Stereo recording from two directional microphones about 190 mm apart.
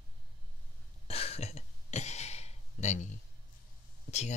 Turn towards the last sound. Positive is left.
turn(degrees=35)  # may be behind; listen again after turning